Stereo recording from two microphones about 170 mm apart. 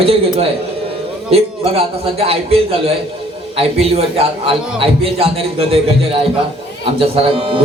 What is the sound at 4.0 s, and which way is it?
A man's voice, 35° right (ahead or behind).